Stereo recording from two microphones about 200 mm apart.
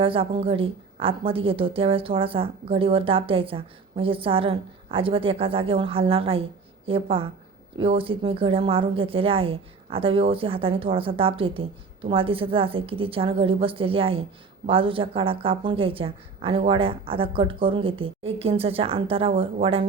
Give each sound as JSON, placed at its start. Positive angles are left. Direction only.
{"t": 0.0, "sound": "a woman's voice", "side_deg": -25}